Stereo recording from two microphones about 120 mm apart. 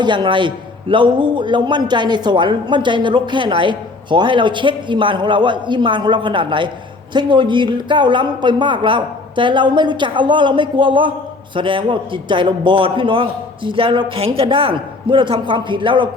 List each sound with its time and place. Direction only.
0.0 s a man's voice: 40° right (ahead or behind)